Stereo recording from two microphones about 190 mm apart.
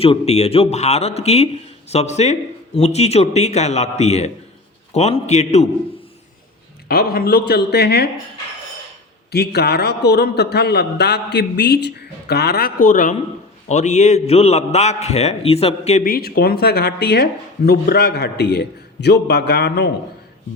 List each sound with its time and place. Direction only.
0.0 s speech: 30° left (ahead or behind)
6.8 s a man's voice: 55° left (ahead or behind)
9.3 s a man's voice: 60° left (ahead or behind); by 16.0 s 35° left (ahead or behind)
16.0 s a man's voice: 50° left (ahead or behind)